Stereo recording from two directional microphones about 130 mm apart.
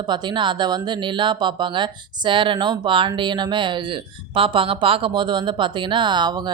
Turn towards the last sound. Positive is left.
turn(degrees=-35)  # may be behind; listen again after turning